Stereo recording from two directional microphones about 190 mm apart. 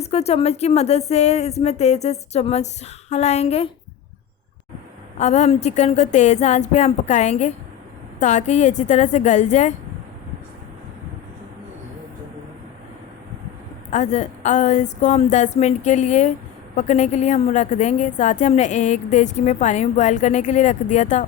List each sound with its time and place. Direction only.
0.0 s a woman's voice: 35° left (ahead or behind)
5.1 s a woman's voice: 35° left (ahead or behind)
13.9 s a woman's voice: 35° left (ahead or behind)